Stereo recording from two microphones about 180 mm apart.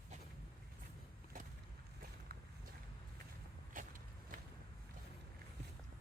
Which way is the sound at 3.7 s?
50° right (ahead or behind).